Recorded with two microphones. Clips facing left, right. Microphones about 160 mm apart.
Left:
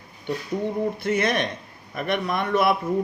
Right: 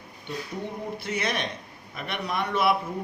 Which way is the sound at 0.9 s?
50° left (ahead or behind).